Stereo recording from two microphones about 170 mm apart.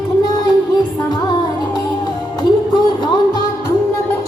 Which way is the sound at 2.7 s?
25° left (ahead or behind).